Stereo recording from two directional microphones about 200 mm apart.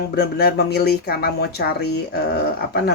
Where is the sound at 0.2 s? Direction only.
50° left (ahead or behind).